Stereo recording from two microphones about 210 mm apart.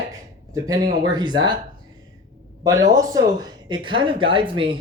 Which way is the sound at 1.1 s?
20° right (ahead or behind).